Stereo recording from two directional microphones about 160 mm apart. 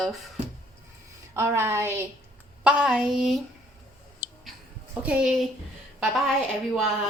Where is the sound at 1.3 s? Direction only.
15° right (ahead or behind).